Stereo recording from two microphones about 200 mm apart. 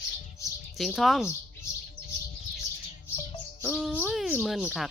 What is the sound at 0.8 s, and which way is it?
Speech, centre (ahead or behind).